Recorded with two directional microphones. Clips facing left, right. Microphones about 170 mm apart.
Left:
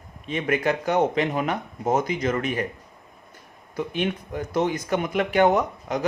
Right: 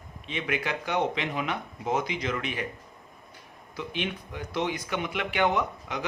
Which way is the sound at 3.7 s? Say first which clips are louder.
Left 7 dB; 45° left (ahead or behind).